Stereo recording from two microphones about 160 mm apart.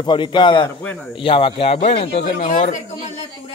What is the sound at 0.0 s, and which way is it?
A man's voice, 30° left (ahead or behind).